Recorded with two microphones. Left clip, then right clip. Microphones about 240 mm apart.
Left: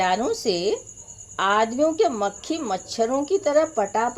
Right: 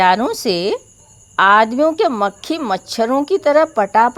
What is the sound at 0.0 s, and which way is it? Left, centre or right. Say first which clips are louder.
Speech: right 8 dB; right.